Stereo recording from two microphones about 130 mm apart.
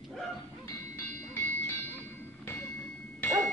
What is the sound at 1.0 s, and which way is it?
Music, 15° left (ahead or behind).